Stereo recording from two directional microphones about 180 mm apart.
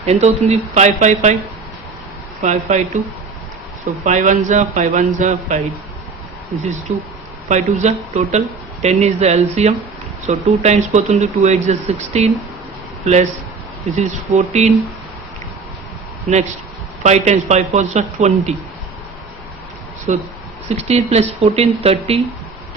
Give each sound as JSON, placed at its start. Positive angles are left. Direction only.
{"t": 0.0, "sound": "speech", "side_deg": -35}
{"t": 2.4, "sound": "speech", "side_deg": -40}
{"t": 4.0, "sound": "a man's voice", "side_deg": -45}
{"t": 6.9, "sound": "speech", "side_deg": -35}
{"t": 13.9, "sound": "speech", "side_deg": -40}
{"t": 17.0, "sound": "speech", "side_deg": -40}
{"t": 20.1, "sound": "a man's voice", "side_deg": -45}